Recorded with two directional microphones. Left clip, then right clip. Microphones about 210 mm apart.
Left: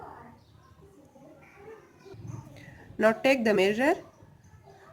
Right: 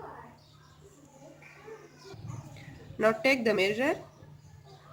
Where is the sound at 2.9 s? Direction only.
25° left (ahead or behind).